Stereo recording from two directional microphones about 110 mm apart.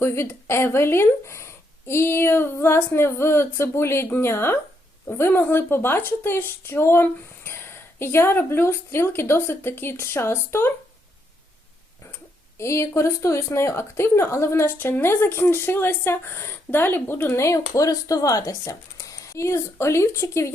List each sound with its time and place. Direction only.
0.0 s speech: 25° left (ahead or behind)
12.5 s speech: 25° left (ahead or behind)